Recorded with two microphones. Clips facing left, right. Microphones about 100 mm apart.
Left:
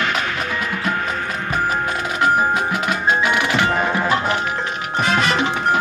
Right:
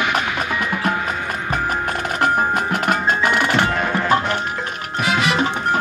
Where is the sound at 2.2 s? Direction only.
50° right (ahead or behind).